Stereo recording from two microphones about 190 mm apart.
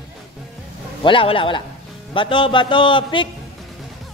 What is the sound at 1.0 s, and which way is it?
A man's voice, 25° left (ahead or behind).